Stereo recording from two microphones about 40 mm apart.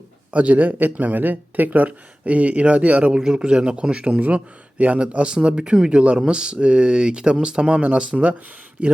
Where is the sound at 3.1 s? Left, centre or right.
Right.